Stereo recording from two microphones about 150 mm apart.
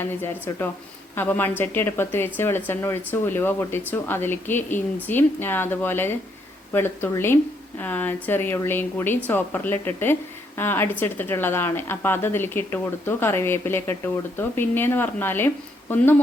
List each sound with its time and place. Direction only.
0.0 s speech: 15° left (ahead or behind)